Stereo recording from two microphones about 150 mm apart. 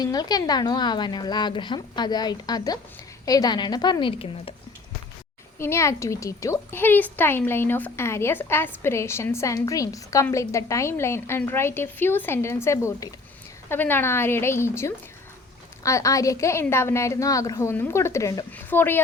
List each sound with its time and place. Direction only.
0.0 s a woman's voice: 25° left (ahead or behind)
5.5 s a woman's voice: 15° left (ahead or behind)